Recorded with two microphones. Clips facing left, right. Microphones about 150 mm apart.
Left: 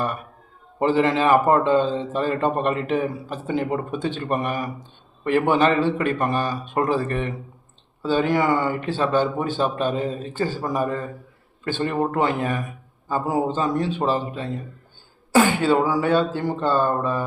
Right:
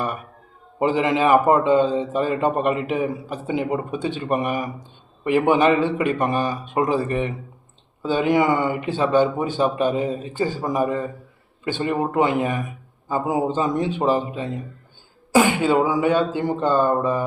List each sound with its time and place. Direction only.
0.8 s a man's voice: 15° right (ahead or behind)